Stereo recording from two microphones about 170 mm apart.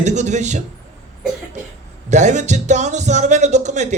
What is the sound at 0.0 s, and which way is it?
Speech, 45° right (ahead or behind).